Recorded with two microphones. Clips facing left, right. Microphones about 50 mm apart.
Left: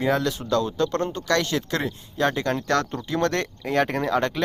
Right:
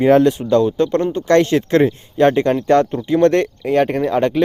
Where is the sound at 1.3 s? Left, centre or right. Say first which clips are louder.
Right 11 dB; right.